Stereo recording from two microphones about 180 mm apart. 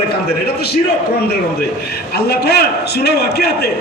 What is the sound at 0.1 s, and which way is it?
Speech, 65° left (ahead or behind).